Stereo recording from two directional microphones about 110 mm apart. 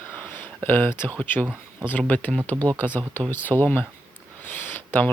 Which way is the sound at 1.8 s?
15° left (ahead or behind).